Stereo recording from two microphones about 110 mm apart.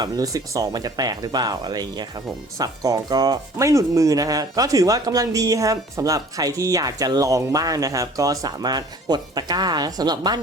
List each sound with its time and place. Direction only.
0.0 s speech: 35° right (ahead or behind)